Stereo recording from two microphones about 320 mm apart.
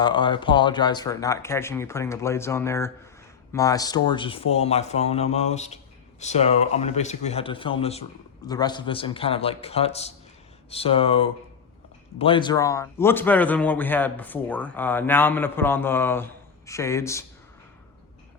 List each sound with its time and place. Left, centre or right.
0.0 s a man's voice: centre